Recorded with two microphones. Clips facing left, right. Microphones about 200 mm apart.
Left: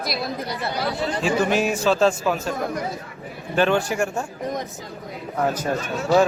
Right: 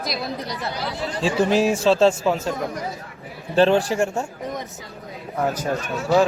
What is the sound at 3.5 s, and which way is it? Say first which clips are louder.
Speech: right 3 dB; 30° right (ahead or behind).